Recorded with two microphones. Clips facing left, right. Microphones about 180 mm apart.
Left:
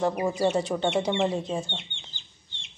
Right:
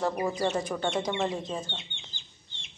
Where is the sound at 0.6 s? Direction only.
25° left (ahead or behind).